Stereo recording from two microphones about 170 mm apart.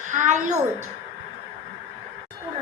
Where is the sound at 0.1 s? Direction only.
45° right (ahead or behind).